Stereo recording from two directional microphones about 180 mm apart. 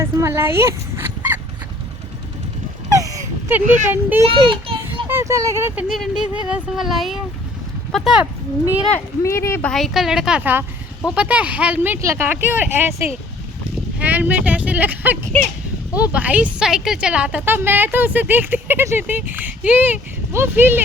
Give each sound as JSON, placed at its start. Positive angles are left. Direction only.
{"t": 0.0, "sound": "dog", "side_deg": -15}
{"t": 3.0, "sound": "a sound", "side_deg": -20}
{"t": 3.8, "sound": "speech", "side_deg": -10}
{"t": 4.3, "sound": "children playing", "side_deg": -30}
{"t": 5.0, "sound": "speech", "side_deg": -15}
{"t": 5.9, "sound": "speech", "side_deg": 0}
{"t": 8.9, "sound": "speech", "side_deg": 15}
{"t": 14.0, "sound": "a sound", "side_deg": -10}
{"t": 16.0, "sound": "speech", "side_deg": -10}